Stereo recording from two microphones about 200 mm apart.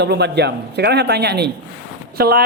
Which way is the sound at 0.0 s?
55° right (ahead or behind).